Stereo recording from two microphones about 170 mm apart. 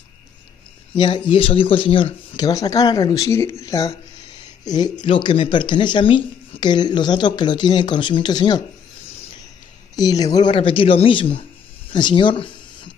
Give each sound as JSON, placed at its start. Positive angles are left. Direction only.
{"t": 0.9, "sound": "speech", "side_deg": 30}
{"t": 9.9, "sound": "speech", "side_deg": 20}